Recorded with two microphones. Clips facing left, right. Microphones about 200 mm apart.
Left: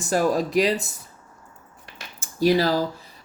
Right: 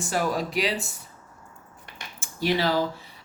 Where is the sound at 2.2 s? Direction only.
40° left (ahead or behind).